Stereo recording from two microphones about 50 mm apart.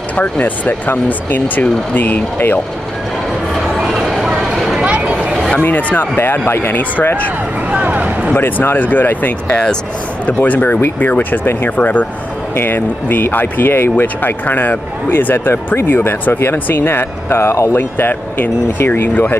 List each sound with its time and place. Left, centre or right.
0.1 s speech: left
3.8 s a sound: centre
4.7 s a sound: right
5.6 s speech: left
6.1 s speech: left
7.7 s speech: right
8.4 s speech: left
17.9 s speech: left